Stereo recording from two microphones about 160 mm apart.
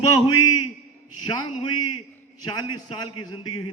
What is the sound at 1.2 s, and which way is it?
A man's voice, 30° left (ahead or behind).